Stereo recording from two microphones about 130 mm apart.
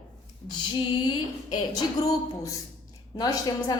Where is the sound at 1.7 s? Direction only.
30° left (ahead or behind).